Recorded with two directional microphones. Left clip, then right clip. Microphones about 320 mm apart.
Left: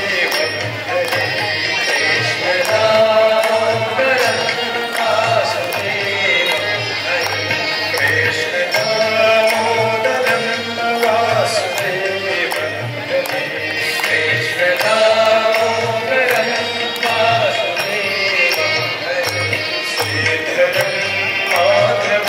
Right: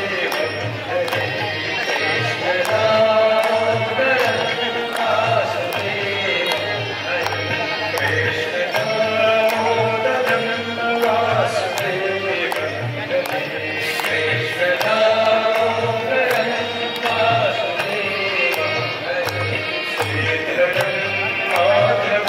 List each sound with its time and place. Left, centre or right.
2.8 s music: centre
10.0 s music: centre
14.1 s music: centre
21.5 s music: centre